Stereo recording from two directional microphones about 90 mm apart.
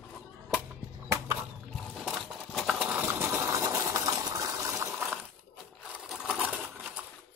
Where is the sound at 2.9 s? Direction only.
25° right (ahead or behind).